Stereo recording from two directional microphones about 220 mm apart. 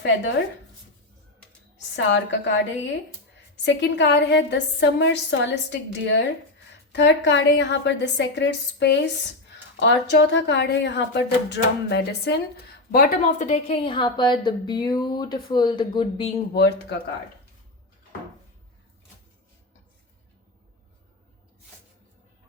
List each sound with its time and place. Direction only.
2.1 s a woman's voice: 55° left (ahead or behind); by 16.3 s 20° left (ahead or behind)
16.6 s a woman's voice: 45° left (ahead or behind)